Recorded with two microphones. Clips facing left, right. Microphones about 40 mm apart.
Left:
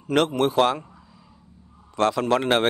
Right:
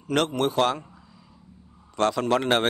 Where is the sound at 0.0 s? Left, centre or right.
Centre.